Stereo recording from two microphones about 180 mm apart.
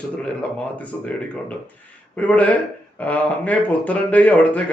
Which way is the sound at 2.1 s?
5° left (ahead or behind).